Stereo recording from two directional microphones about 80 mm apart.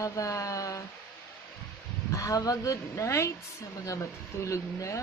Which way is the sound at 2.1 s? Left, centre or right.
Left.